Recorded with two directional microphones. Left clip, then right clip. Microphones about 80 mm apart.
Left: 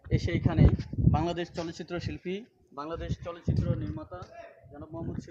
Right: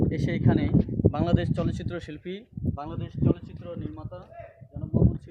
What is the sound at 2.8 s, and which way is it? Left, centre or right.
Speech, right.